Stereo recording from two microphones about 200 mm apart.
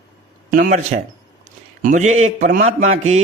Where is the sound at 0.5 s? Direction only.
40° right (ahead or behind).